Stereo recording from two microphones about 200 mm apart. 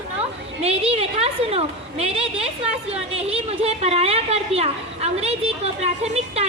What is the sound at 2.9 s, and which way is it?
A woman's voice, 30° right (ahead or behind).